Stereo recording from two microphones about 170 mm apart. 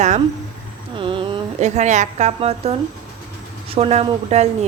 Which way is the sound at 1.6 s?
40° right (ahead or behind).